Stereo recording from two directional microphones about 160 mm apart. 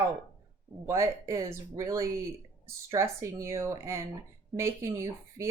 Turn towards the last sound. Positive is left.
turn(degrees=-15)  # may be behind; listen again after turning